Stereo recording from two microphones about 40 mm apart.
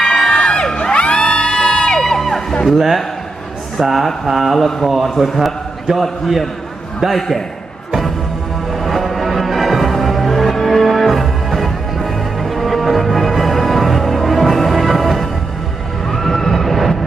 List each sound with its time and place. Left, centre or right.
0.3 s crowd: left
2.0 s music: centre
2.6 s a man's voice: centre
4.5 s a man's voice: centre
7.2 s a man's voice: centre
8.8 s music: centre